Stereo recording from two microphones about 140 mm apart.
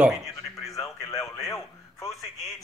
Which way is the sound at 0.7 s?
20° left (ahead or behind).